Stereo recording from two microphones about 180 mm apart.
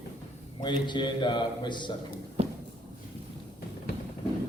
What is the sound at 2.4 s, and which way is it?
Walk, 35° right (ahead or behind).